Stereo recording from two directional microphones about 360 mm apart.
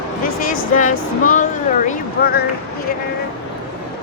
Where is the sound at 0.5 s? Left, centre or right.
Left.